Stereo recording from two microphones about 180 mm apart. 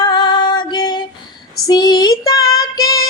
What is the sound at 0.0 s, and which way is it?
Music, 25° left (ahead or behind).